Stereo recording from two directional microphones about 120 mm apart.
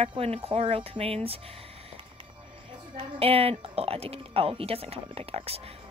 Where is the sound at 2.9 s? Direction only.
55° right (ahead or behind).